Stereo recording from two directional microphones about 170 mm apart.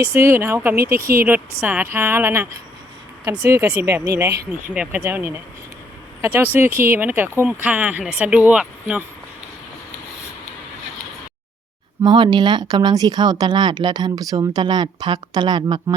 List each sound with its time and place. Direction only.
0.2 s speech: 15° right (ahead or behind)
4.7 s speech: 5° right (ahead or behind)
12.0 s speech: 25° right (ahead or behind)